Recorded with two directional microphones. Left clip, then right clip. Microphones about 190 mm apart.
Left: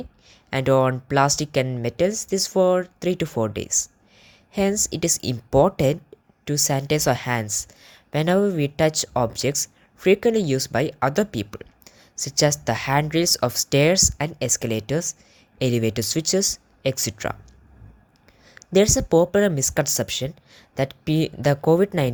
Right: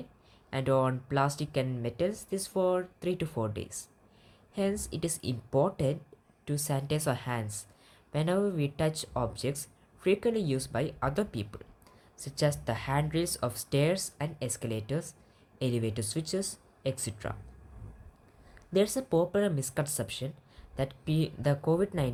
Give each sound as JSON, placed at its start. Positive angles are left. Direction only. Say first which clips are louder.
{"t": 0.3, "sound": "a woman's voice", "louder": "left 10 dB", "side_deg": 45}
{"t": 18.4, "sound": "a woman's voice", "louder": "left 10 dB", "side_deg": 45}